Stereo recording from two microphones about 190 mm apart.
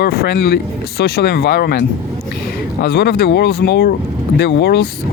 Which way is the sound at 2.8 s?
60° left (ahead or behind).